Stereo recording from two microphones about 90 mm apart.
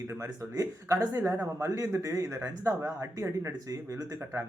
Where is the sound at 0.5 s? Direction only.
35° right (ahead or behind).